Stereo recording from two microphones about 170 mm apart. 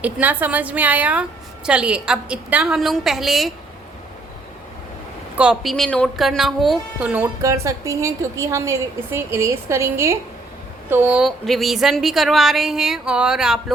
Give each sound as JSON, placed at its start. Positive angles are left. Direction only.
{"t": 0.0, "sound": "a woman's voice", "side_deg": -10}
{"t": 5.4, "sound": "a woman's voice", "side_deg": 0}